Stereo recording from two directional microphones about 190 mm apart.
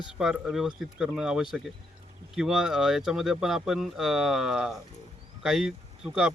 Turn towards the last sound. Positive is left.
turn(degrees=-5)  # may be behind; listen again after turning